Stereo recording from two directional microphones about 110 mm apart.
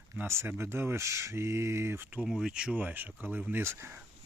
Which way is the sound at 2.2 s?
5° right (ahead or behind).